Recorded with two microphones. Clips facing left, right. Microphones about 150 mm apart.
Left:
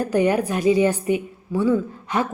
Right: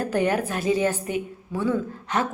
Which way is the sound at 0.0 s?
15° left (ahead or behind).